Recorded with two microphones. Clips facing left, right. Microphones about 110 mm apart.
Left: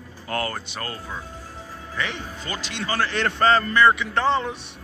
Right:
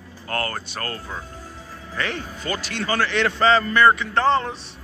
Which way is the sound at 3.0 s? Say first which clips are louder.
Right 1 dB; 40° left (ahead or behind).